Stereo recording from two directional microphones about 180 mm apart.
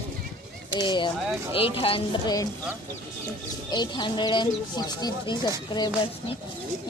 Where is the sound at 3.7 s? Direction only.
25° left (ahead or behind).